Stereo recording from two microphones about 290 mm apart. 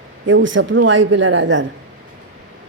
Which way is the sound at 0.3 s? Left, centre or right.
Right.